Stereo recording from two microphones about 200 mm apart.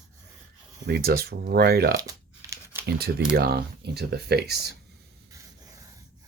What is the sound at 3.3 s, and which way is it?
Speech, 50° right (ahead or behind).